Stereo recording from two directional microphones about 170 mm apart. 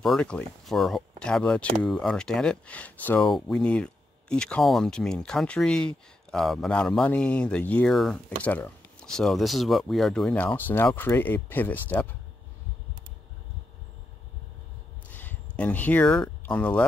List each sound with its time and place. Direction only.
0.0 s speech: 5° left (ahead or behind)
15.0 s speech: 10° left (ahead or behind)